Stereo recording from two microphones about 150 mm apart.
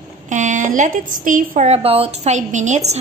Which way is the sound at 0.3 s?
55° right (ahead or behind).